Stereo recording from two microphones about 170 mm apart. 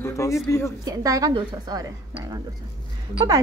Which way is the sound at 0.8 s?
20° right (ahead or behind).